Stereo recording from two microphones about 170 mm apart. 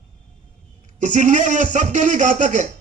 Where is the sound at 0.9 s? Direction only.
45° right (ahead or behind).